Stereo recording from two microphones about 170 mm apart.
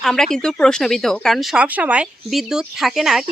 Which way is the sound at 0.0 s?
5° left (ahead or behind).